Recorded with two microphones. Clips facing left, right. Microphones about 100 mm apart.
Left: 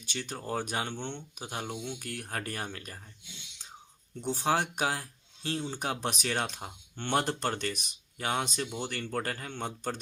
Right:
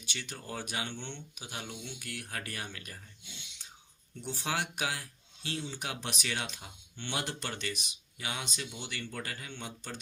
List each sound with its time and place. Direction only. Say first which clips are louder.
0.0 s speech: left 5 dB; 40° left (ahead or behind)
4.2 s speech: left 6 dB; 40° left (ahead or behind)